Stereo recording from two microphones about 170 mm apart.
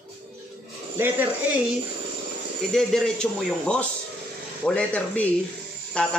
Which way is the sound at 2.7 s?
5° left (ahead or behind).